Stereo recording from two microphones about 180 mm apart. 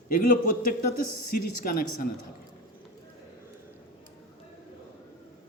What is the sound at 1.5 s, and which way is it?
Speech, 50° left (ahead or behind).